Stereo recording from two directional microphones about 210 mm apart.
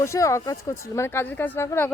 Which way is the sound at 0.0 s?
15° left (ahead or behind).